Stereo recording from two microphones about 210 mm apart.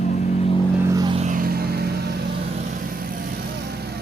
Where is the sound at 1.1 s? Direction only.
35° right (ahead or behind).